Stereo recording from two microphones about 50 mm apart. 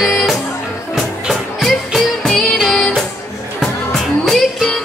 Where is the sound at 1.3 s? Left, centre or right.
Centre.